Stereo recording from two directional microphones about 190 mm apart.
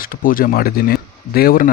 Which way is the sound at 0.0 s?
50° left (ahead or behind).